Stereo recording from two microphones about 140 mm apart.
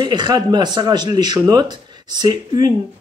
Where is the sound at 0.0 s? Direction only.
30° right (ahead or behind).